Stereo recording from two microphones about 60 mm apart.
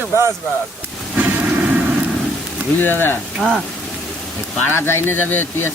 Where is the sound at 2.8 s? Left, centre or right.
Left.